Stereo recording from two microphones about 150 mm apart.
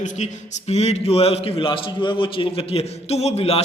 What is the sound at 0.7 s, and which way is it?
A man's voice, 45° left (ahead or behind).